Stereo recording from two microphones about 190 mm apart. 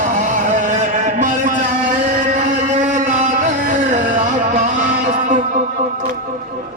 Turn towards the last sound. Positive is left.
turn(degrees=-40)  # may be behind; listen again after turning